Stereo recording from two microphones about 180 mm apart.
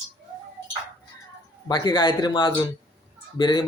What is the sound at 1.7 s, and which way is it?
Speech, 25° left (ahead or behind).